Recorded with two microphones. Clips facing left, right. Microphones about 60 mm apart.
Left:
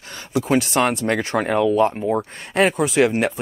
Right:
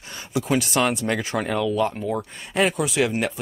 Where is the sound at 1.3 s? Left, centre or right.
Left.